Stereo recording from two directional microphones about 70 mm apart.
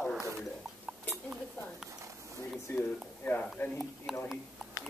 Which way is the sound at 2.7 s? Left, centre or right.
Left.